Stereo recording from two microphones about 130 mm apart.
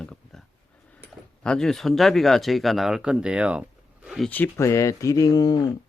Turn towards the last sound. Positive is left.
turn(degrees=30)  # may be behind; listen again after turning